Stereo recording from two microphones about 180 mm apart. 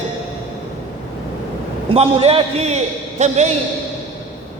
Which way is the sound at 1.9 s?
35° right (ahead or behind).